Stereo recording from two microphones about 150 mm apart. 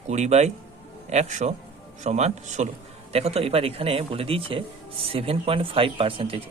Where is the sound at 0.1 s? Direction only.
50° right (ahead or behind).